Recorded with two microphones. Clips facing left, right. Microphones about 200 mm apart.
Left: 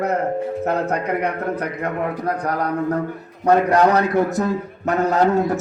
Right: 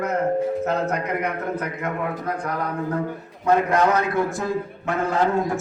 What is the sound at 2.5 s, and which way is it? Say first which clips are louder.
A man's voice: left 5 dB; 40° left (ahead or behind).